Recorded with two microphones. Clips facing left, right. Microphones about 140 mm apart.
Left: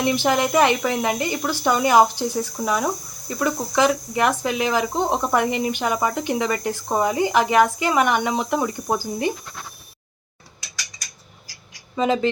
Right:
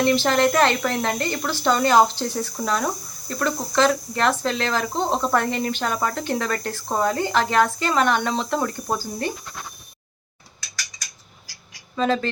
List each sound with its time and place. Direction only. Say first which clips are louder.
0.0 s speech: right 1 dB; 15° left (ahead or behind)
11.9 s speech: left 2 dB; 15° left (ahead or behind)